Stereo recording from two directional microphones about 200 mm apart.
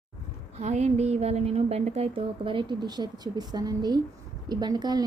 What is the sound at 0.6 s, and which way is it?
A woman's voice, 35° right (ahead or behind).